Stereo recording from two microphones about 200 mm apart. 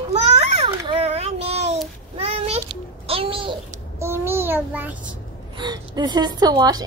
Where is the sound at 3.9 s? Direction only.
15° right (ahead or behind).